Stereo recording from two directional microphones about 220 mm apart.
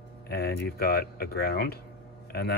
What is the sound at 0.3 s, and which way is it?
Speech, 45° left (ahead or behind).